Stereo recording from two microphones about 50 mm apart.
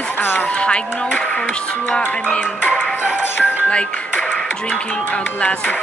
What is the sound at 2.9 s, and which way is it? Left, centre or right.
Music, left.